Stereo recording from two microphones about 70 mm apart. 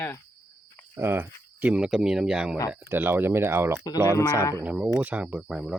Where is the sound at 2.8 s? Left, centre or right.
Right.